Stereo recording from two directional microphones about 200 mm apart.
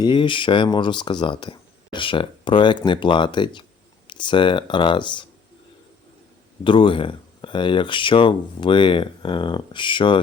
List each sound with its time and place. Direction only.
0.0 s speech: 25° left (ahead or behind)
6.7 s speech: 25° left (ahead or behind)